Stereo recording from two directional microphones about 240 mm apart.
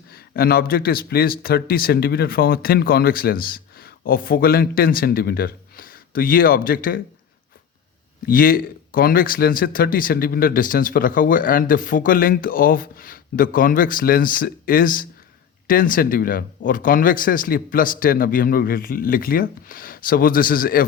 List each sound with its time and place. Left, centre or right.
0.1 s speech: left
8.3 s speech: left